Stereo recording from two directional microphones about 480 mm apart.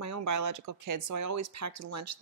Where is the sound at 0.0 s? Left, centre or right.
Right.